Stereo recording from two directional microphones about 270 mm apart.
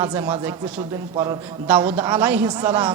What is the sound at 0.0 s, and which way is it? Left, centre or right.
A man's voice, centre.